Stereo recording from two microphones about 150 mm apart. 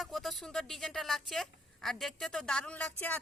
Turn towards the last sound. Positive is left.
turn(degrees=10)  # may be behind; listen again after turning